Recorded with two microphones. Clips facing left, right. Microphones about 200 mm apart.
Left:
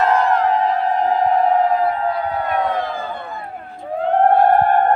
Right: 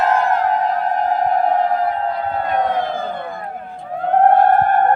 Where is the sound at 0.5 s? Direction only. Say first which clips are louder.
Left 1 dB; 50° right (ahead or behind).